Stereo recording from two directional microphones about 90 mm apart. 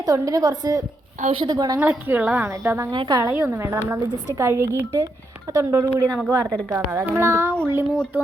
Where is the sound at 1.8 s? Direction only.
20° right (ahead or behind).